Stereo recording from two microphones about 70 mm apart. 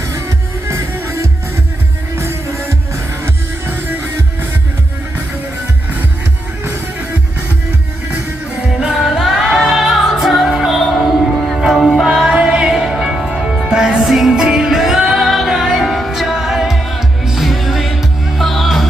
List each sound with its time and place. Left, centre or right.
2.1 s music: right
8.8 s music: centre
9.0 s music: centre